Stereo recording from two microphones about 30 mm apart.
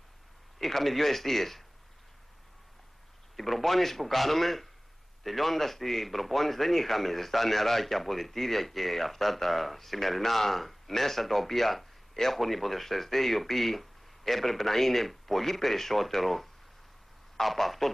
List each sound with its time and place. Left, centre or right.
0.6 s a man's voice: centre
3.3 s a man's voice: centre